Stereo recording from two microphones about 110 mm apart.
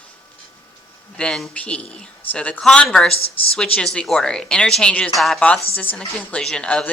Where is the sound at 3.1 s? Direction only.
60° left (ahead or behind).